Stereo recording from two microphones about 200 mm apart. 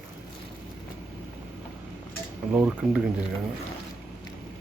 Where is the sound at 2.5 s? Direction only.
10° right (ahead or behind).